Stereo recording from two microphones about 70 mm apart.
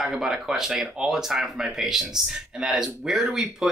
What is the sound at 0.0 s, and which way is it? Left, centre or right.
Speech, centre.